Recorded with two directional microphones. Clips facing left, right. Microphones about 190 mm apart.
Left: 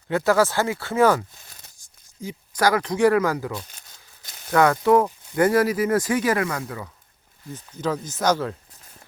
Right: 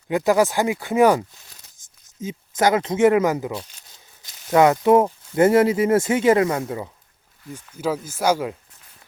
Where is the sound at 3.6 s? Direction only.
50° left (ahead or behind).